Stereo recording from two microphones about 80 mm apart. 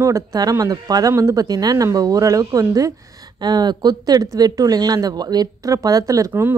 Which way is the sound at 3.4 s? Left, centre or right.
Right.